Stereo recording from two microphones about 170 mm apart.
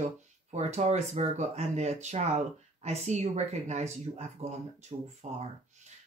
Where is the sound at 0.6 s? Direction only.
40° right (ahead or behind).